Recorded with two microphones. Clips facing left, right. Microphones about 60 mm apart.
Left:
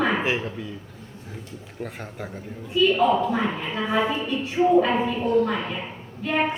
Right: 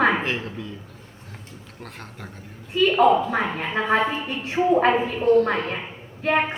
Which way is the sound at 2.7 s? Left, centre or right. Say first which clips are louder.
Right 2 dB; right.